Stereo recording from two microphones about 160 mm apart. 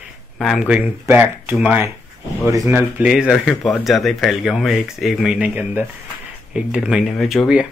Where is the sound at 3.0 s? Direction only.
5° right (ahead or behind).